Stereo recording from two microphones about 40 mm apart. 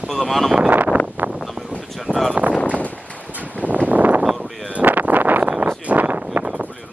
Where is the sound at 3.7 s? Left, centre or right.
Right.